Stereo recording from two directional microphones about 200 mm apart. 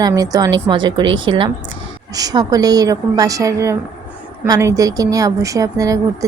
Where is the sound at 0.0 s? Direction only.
20° right (ahead or behind).